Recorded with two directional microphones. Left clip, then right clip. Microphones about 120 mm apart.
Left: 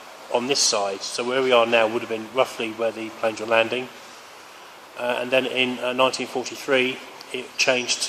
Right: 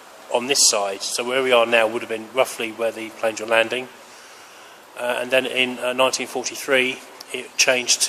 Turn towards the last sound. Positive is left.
turn(degrees=-15)  # may be behind; listen again after turning